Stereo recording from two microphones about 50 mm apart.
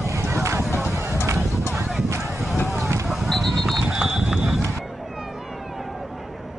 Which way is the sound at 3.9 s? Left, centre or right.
Centre.